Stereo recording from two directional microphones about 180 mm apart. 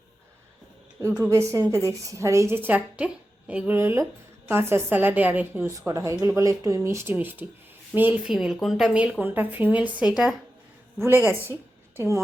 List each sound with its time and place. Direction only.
1.3 s a woman's voice: 15° right (ahead or behind)